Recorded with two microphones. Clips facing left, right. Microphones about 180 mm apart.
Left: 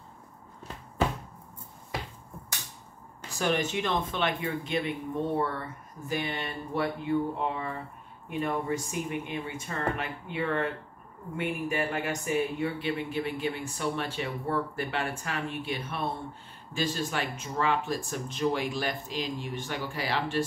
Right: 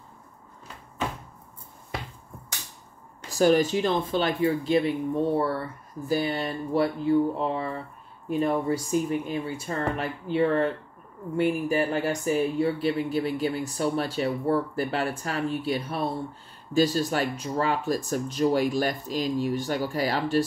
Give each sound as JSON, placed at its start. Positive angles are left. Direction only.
{"t": 3.3, "sound": "speech", "side_deg": -35}